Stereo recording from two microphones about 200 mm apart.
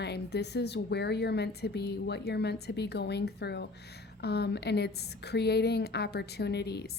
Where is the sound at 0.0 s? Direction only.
55° left (ahead or behind).